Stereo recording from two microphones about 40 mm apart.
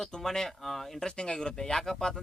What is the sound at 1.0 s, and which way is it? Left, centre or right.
Speech, left.